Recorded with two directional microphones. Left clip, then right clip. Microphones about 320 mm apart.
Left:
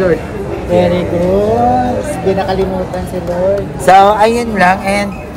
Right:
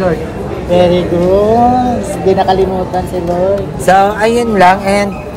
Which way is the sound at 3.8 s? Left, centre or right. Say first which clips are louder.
Left 3 dB; left.